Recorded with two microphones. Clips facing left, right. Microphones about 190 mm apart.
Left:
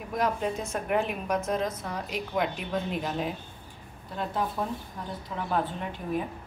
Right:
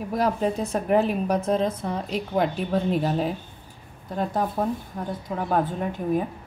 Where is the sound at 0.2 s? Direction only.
35° right (ahead or behind).